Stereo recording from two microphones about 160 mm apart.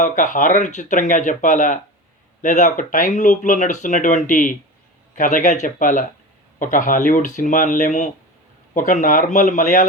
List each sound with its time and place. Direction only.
0.0 s speech: 55° left (ahead or behind)